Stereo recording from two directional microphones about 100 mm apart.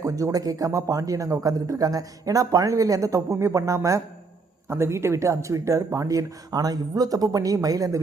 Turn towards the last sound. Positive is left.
turn(degrees=-35)  # may be behind; listen again after turning